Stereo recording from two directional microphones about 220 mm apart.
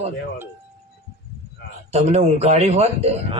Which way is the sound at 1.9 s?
30° right (ahead or behind).